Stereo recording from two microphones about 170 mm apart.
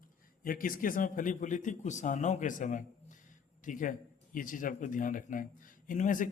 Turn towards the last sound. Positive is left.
turn(degrees=50)  # may be behind; listen again after turning